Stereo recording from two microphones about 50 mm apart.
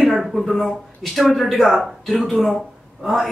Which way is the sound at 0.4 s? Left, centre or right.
Centre.